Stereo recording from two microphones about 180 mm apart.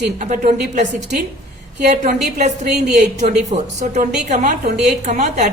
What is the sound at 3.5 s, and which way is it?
A woman's voice, 40° right (ahead or behind).